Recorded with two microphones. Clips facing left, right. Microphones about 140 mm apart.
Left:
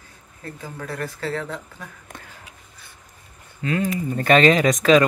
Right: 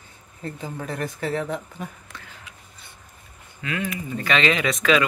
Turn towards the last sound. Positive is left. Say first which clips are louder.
# left 5 dB
turn(degrees=40)  # may be behind; listen again after turning